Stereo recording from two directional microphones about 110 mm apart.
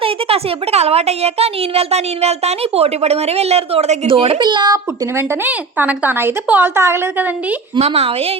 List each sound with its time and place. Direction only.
0.0 s a woman's voice: 65° right (ahead or behind)
4.1 s a woman's voice: 50° right (ahead or behind)
5.1 s a woman's voice: 15° right (ahead or behind)
7.8 s a woman's voice: 70° right (ahead or behind)